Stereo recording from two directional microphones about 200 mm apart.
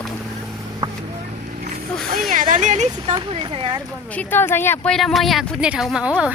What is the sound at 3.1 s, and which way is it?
Speech, 25° right (ahead or behind).